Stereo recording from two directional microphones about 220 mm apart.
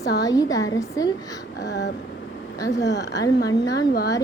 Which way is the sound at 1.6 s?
50° left (ahead or behind).